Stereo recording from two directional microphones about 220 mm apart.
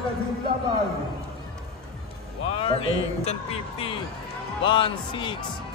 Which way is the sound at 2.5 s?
25° left (ahead or behind).